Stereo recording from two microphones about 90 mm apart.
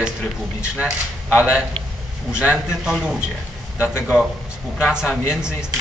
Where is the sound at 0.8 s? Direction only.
10° right (ahead or behind).